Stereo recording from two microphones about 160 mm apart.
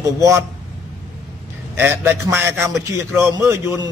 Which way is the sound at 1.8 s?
10° right (ahead or behind).